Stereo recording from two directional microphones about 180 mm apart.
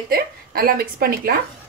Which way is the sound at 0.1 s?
55° right (ahead or behind).